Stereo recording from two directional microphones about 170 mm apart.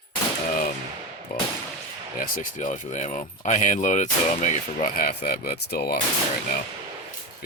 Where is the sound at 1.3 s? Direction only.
65° left (ahead or behind).